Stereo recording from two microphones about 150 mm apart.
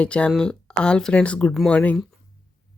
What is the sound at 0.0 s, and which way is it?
Speech, 5° left (ahead or behind).